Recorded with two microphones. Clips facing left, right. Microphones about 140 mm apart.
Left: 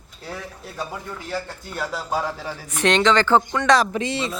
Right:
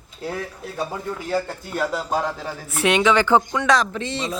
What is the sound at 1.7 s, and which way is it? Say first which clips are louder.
A woman's voice: right 3 dB; centre (ahead or behind).